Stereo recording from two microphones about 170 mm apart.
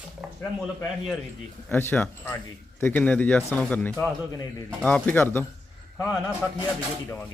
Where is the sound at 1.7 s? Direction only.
10° left (ahead or behind).